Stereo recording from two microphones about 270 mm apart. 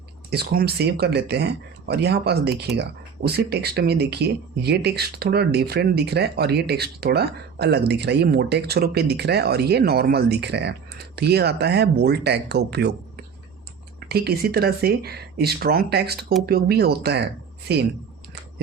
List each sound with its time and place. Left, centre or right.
0.3 s speech: right
14.1 s speech: right